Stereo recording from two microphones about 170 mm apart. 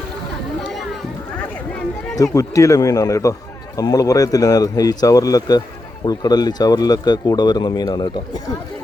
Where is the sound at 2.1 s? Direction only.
20° left (ahead or behind).